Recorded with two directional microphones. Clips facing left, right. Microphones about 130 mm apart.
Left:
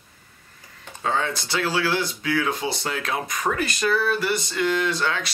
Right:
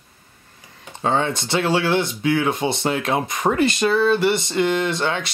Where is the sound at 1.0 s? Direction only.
25° right (ahead or behind).